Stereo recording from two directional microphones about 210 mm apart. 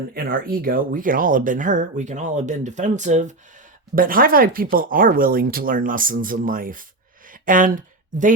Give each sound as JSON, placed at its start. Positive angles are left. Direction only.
{"t": 0.1, "sound": "speech", "side_deg": -45}